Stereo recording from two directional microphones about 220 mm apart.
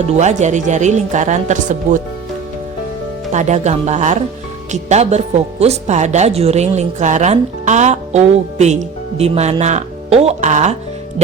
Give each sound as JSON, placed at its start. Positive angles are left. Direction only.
{"t": 0.0, "sound": "speech", "side_deg": -30}
{"t": 3.3, "sound": "speech", "side_deg": -30}